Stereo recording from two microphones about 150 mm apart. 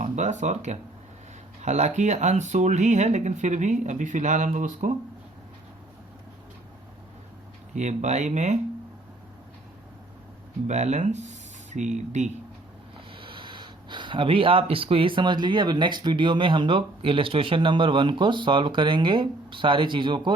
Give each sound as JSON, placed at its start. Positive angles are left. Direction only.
{"t": 0.0, "sound": "speech", "side_deg": -55}
{"t": 7.8, "sound": "speech", "side_deg": -50}
{"t": 10.7, "sound": "speech", "side_deg": -50}
{"t": 13.1, "sound": "speech", "side_deg": -35}